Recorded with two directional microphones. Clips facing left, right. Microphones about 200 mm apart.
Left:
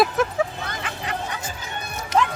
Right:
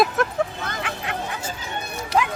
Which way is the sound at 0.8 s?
Centre (ahead or behind).